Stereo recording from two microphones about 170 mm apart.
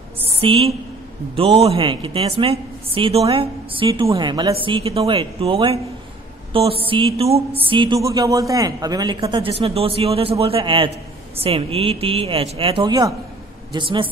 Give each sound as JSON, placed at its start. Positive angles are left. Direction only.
{"t": 0.4, "sound": "a woman's voice", "side_deg": -35}